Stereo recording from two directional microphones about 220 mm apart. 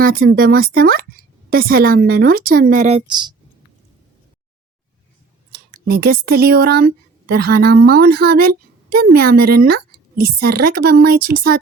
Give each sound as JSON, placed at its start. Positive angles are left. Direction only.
{"t": 0.0, "sound": "speech", "side_deg": -40}
{"t": 3.1, "sound": "speech", "side_deg": -20}
{"t": 5.5, "sound": "speech", "side_deg": -40}